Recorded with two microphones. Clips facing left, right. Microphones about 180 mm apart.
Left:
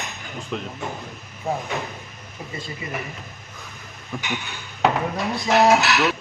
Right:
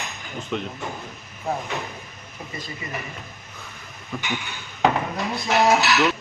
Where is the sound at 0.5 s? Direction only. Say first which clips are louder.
Right 2 dB; centre (ahead or behind).